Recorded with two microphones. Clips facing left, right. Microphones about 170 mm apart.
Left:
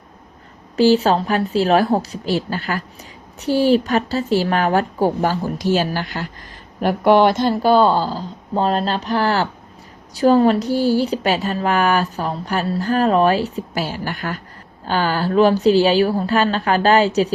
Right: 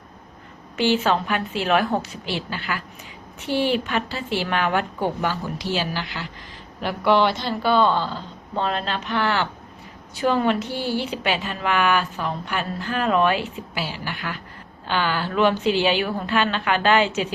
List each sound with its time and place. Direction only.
0.8 s speech: 40° left (ahead or behind)